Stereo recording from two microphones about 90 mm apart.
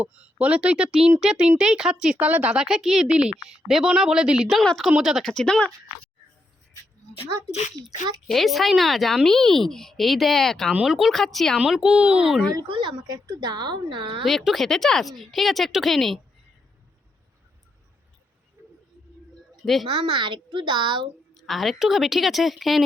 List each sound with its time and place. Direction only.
0.0 s speech: 15° right (ahead or behind)
5.2 s speech: 5° left (ahead or behind)
8.3 s speech: centre (ahead or behind)
12.6 s a woman's voice: 65° right (ahead or behind)
13.1 s a woman's voice: 45° right (ahead or behind); by 14.3 s 65° right (ahead or behind)
14.3 s speech: centre (ahead or behind)
18.6 s a sound: 35° right (ahead or behind)
20.1 s a woman's voice: 60° right (ahead or behind)
21.4 s speech: centre (ahead or behind)